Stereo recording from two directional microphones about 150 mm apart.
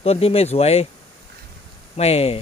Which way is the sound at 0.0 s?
40° left (ahead or behind).